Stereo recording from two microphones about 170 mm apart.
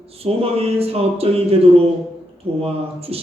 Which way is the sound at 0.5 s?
35° right (ahead or behind).